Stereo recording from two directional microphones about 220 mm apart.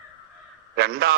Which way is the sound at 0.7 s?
45° right (ahead or behind).